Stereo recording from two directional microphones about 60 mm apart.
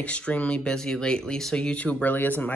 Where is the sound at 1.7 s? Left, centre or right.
Left.